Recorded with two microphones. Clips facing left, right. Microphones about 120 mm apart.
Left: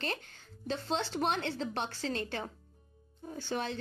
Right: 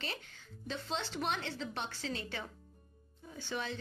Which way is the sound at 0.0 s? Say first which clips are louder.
Left 6 dB; 45° left (ahead or behind).